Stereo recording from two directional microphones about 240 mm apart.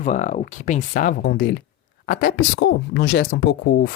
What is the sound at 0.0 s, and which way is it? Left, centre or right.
Speech, left.